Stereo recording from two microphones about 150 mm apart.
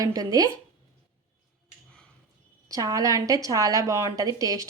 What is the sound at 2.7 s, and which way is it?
A woman's voice, 25° right (ahead or behind).